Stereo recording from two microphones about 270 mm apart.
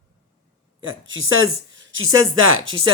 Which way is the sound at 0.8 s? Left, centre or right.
Right.